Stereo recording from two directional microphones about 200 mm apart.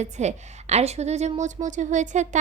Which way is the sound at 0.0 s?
35° right (ahead or behind).